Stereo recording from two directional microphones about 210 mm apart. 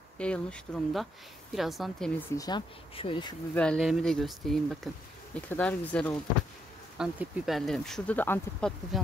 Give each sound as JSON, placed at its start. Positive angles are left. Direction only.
{"t": 0.2, "sound": "speech", "side_deg": 5}
{"t": 2.3, "sound": "speech", "side_deg": 20}
{"t": 3.5, "sound": "speech", "side_deg": 5}